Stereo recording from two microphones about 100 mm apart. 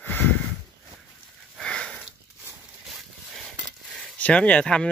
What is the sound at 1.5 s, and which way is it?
Sniff, 10° left (ahead or behind).